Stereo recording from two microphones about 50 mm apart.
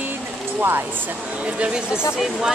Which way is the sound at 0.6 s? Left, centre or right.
Right.